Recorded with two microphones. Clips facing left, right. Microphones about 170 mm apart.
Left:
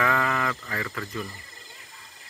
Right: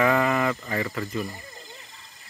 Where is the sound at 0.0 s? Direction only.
15° right (ahead or behind).